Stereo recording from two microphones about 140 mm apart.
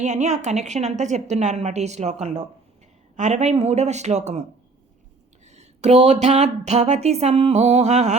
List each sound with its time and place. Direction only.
0.0 s a woman's voice: 55° right (ahead or behind)
5.5 s speech: 55° right (ahead or behind)